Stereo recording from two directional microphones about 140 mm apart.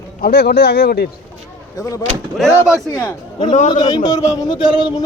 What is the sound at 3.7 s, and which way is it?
Speech, 30° left (ahead or behind).